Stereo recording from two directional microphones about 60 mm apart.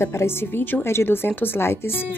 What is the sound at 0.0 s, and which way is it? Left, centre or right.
Speech, left.